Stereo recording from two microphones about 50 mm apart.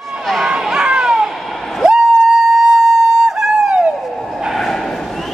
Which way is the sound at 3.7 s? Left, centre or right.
Right.